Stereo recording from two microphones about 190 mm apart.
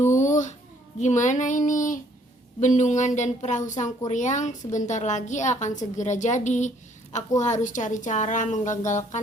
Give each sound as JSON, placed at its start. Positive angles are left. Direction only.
{"t": 0.1, "sound": "babbling", "side_deg": 40}
{"t": 0.9, "sound": "a woman's voice", "side_deg": 40}